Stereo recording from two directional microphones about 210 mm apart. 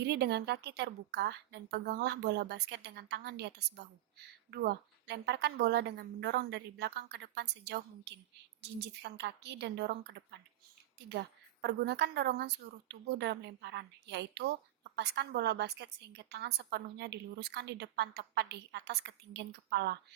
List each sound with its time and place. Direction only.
0.0 s a woman's voice: 50° right (ahead or behind)
4.5 s a woman's voice: 50° right (ahead or behind)